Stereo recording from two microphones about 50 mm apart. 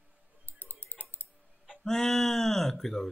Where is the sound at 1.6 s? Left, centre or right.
Centre.